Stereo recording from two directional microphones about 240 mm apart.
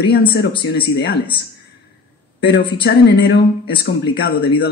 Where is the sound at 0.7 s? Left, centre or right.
Left.